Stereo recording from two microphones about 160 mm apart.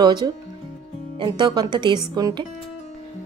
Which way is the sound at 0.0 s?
25° right (ahead or behind).